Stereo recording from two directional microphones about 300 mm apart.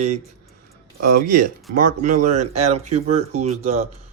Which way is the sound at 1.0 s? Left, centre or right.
Right.